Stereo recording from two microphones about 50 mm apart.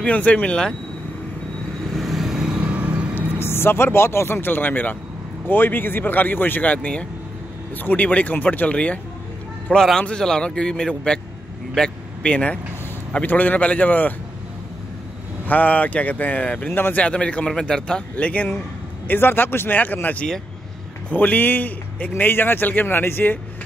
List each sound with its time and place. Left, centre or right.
0.0 s speech: left
2.0 s vehicle: centre
2.6 s vehicle: right
3.3 s speech: left
9.9 s a man's voice: centre
11.7 s vehicle: centre
12.3 s speech: left
15.4 s speech: left
19.0 s a man's voice: left